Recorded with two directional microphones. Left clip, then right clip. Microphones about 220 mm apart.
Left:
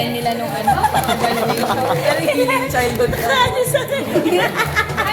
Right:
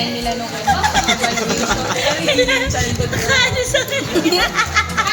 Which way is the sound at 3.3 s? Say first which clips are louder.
Right 2 dB; 70° right (ahead or behind).